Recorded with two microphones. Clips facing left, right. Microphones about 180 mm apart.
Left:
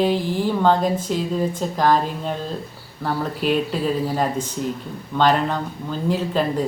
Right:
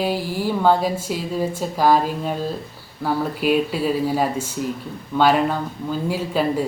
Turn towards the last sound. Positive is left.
turn(degrees=-10)  # may be behind; listen again after turning